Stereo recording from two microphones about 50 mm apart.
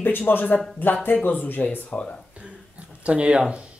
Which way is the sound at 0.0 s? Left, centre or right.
Left.